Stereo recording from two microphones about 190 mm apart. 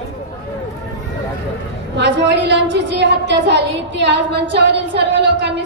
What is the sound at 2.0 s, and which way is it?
A woman's voice, 65° right (ahead or behind).